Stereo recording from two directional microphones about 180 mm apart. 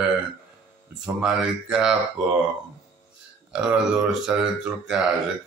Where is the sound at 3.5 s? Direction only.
5° right (ahead or behind).